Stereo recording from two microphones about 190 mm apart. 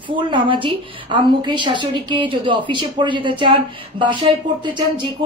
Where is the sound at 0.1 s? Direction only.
25° right (ahead or behind).